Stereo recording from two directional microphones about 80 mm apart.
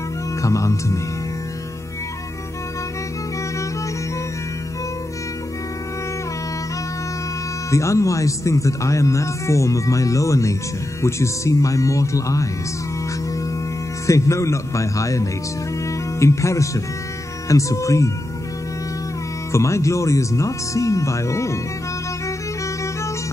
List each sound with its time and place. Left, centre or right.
0.4 s speech: left
7.7 s speech: left
14.0 s speech: left
19.5 s speech: left